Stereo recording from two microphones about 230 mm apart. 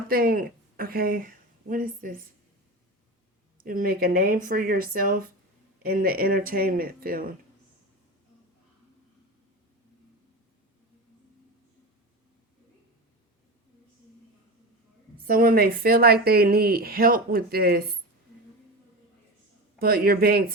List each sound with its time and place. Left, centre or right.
0.1 s speech: right
3.6 s a woman's voice: right
15.2 s a woman's voice: right
19.8 s a woman's voice: right